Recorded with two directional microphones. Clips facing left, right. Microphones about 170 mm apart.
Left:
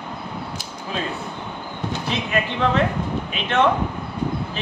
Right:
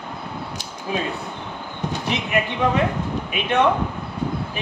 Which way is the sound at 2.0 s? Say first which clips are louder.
Right 1 dB; 15° right (ahead or behind).